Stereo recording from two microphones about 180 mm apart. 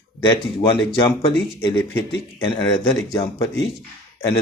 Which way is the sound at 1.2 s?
25° left (ahead or behind).